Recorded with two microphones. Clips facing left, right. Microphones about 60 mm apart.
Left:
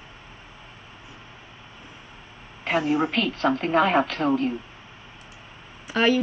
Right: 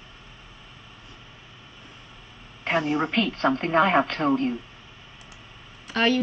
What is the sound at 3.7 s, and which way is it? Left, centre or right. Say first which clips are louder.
Speech: even; right.